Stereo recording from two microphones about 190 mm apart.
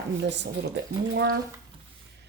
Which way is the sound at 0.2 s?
65° right (ahead or behind).